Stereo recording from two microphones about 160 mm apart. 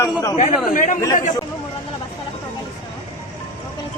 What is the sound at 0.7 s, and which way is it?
Speech, 55° left (ahead or behind).